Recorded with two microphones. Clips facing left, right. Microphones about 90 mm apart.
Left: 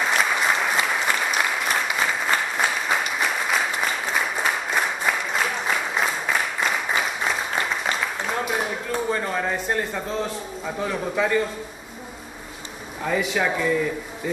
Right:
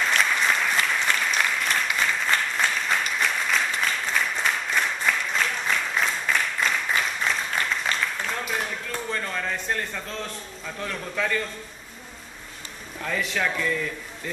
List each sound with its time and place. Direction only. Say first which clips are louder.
0.0 s applause: left 2 dB; 15° left (ahead or behind)
7.9 s a sound: left 2 dB; 15° left (ahead or behind)
9.6 s a man's voice: left 4 dB; 10° left (ahead or behind)
10.6 s a man's voice: left 6 dB; 15° left (ahead or behind)
13.2 s a man's voice: left 2 dB; 5° left (ahead or behind)